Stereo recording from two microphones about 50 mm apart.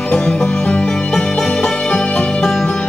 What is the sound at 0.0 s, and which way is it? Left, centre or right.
Music, left.